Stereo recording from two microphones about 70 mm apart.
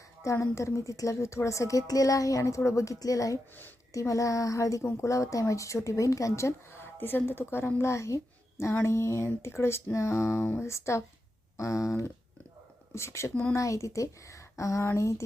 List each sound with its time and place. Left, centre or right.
0.2 s a woman's voice: left